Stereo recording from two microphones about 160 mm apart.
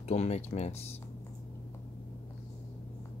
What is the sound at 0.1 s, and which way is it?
Speech, 40° left (ahead or behind).